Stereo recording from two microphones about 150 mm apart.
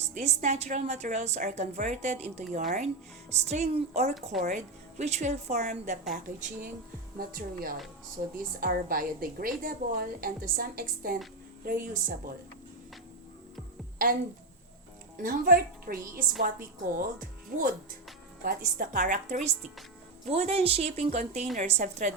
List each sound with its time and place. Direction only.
0.0 s a woman's voice: 50° right (ahead or behind)
4.4 s a woman's voice: 55° right (ahead or behind)
15.2 s a woman's voice: 70° right (ahead or behind); by 19.5 s 55° right (ahead or behind)
20.3 s a woman's voice: 45° right (ahead or behind)